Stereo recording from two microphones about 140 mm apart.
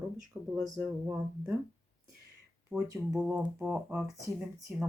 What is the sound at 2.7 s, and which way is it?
Speech, 25° right (ahead or behind).